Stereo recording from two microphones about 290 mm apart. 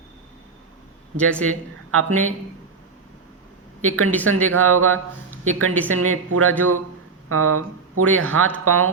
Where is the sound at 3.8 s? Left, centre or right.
Right.